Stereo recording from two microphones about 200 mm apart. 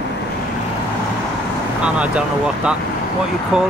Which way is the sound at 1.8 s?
5° right (ahead or behind).